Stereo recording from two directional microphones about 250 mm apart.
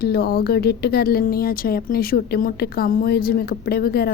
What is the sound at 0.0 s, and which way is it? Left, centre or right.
Speech, left.